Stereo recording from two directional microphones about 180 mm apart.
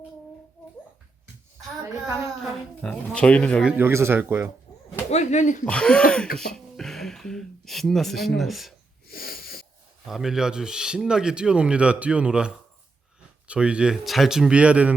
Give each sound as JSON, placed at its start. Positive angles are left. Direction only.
{"t": 2.8, "sound": "speech", "side_deg": 5}
{"t": 3.7, "sound": "speech", "side_deg": -10}
{"t": 4.9, "sound": "speech", "side_deg": 40}
{"t": 5.6, "sound": "speech", "side_deg": 5}
{"t": 6.3, "sound": "a sound", "side_deg": 5}
{"t": 8.4, "sound": "speech", "side_deg": 0}
{"t": 9.0, "sound": "wheeze", "side_deg": 55}
{"t": 10.1, "sound": "speech", "side_deg": 0}